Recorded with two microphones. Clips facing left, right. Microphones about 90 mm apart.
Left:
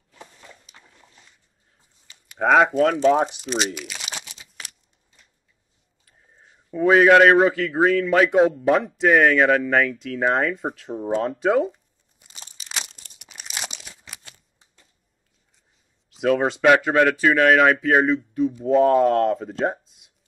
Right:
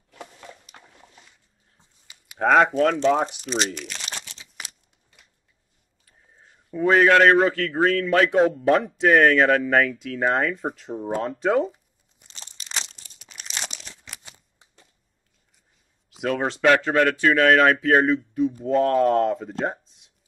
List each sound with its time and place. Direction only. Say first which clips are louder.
0.1 s a sound: right 4 dB; 60° right (ahead or behind)
2.0 s a sound: left 1 dB; 5° right (ahead or behind)
2.4 s speech: left 1 dB; 5° left (ahead or behind)
6.0 s speech: even; centre (ahead or behind)
11.2 s tearing: left 1 dB; centre (ahead or behind)
13.2 s crumpling: left 1 dB; 5° left (ahead or behind)
16.2 s speech: left 4 dB; centre (ahead or behind)